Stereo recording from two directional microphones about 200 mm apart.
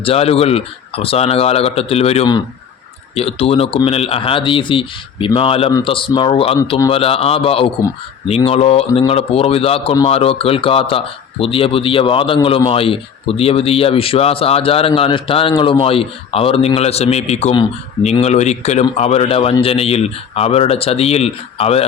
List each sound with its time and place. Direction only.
0.0 s speech: 30° left (ahead or behind)